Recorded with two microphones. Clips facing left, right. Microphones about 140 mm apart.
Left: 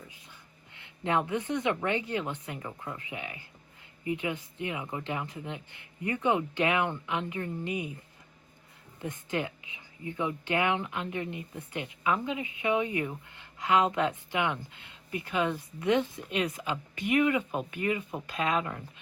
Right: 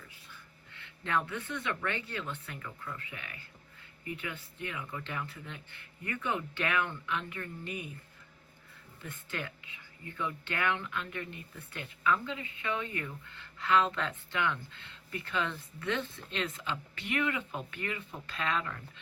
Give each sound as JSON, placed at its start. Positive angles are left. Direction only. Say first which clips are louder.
{"t": 0.1, "sound": "speech", "louder": "left 1 dB", "side_deg": 20}
{"t": 9.0, "sound": "speech", "louder": "left 8 dB", "side_deg": 20}